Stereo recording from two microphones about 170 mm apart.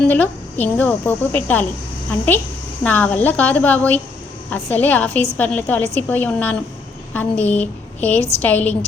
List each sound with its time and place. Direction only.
0.0 s a woman's voice: 10° left (ahead or behind)
2.8 s a woman's voice: 10° left (ahead or behind)